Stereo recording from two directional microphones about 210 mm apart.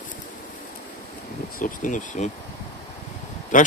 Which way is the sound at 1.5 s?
40° left (ahead or behind).